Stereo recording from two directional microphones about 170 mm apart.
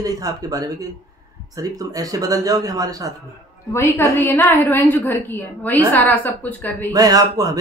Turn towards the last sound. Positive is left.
turn(degrees=-20)  # may be behind; listen again after turning